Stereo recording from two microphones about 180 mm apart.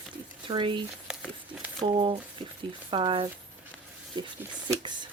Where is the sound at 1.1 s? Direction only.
5° right (ahead or behind).